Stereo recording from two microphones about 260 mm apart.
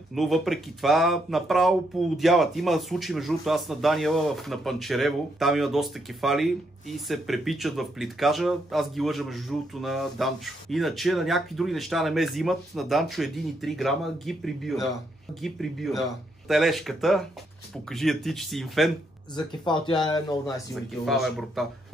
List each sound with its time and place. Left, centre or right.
0.1 s speech: centre
19.3 s speech: centre
21.0 s speech: centre